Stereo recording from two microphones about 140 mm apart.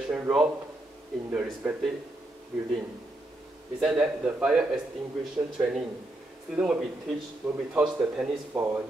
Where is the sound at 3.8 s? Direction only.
5° right (ahead or behind).